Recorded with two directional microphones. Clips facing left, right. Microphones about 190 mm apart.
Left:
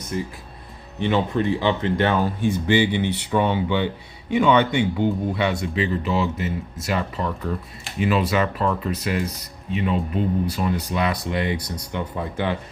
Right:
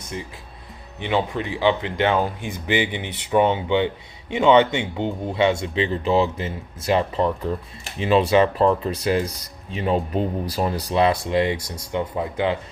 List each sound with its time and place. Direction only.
0.9 s speech: 15° right (ahead or behind)